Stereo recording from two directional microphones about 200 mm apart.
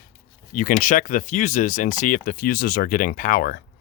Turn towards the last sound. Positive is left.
turn(degrees=45)  # may be behind; listen again after turning